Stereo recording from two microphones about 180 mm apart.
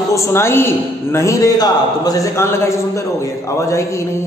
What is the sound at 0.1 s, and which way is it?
A woman's voice, 15° left (ahead or behind).